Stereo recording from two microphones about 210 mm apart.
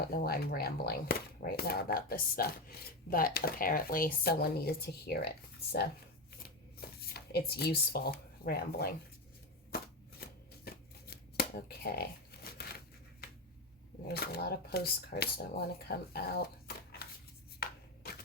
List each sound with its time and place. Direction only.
0.1 s speech: 45° left (ahead or behind)
6.4 s shuffling cards: 45° left (ahead or behind)
7.5 s speech: 50° left (ahead or behind)
9.7 s shuffling cards: 45° left (ahead or behind)
14.1 s speech: 50° left (ahead or behind)
15.9 s dog: 50° left (ahead or behind)